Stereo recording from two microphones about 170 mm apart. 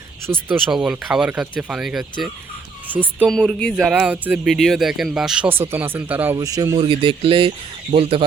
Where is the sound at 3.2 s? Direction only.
5° left (ahead or behind).